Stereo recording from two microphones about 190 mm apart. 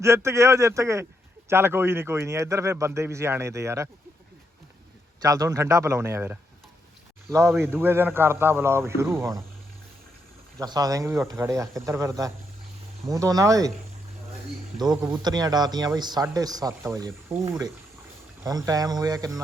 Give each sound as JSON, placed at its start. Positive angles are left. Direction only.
{"t": 0.0, "sound": "speech", "side_deg": -15}
{"t": 5.2, "sound": "speech", "side_deg": -15}
{"t": 10.6, "sound": "speech", "side_deg": -20}
{"t": 15.2, "sound": "speech", "side_deg": -20}